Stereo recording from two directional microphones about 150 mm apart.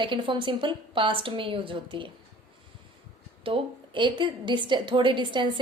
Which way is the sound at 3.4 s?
35° right (ahead or behind).